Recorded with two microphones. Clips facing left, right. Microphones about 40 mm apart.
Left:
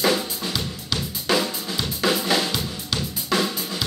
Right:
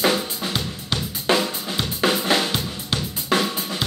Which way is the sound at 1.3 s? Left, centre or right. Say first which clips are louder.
Left 1 dB; centre.